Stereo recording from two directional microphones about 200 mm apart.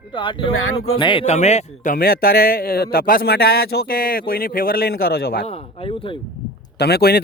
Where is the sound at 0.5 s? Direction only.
90° left.